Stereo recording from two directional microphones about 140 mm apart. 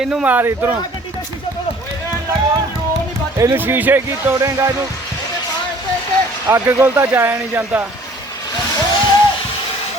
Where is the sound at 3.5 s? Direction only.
15° right (ahead or behind).